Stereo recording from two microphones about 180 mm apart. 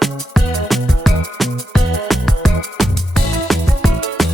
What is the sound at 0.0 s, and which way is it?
Music, centre (ahead or behind).